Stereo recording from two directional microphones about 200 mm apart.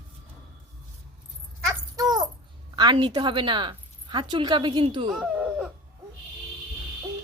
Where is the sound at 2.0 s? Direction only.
20° right (ahead or behind).